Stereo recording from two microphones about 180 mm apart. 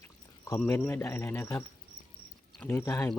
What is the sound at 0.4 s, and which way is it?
Speech, 15° left (ahead or behind).